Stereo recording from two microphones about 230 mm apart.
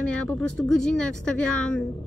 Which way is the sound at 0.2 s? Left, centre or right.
Centre.